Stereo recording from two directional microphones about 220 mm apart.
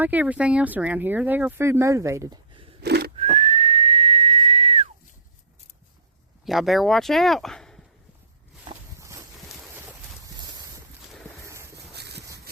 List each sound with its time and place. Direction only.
0.0 s speech: 10° right (ahead or behind)
2.8 s whistling: 50° right (ahead or behind)
3.2 s whistling: 30° right (ahead or behind)
6.4 s speech: centre (ahead or behind)
9.0 s a sound: 15° right (ahead or behind)
11.4 s boat: 15° right (ahead or behind)
11.9 s a sound: 50° right (ahead or behind)